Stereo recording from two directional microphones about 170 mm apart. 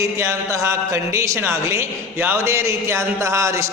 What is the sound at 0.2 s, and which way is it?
A man's voice, 20° right (ahead or behind).